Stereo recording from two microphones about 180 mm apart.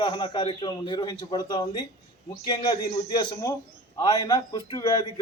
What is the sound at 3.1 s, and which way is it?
A man's voice, 20° left (ahead or behind).